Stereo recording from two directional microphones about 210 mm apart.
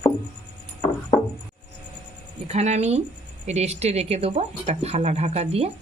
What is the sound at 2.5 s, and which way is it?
Speech, 30° right (ahead or behind).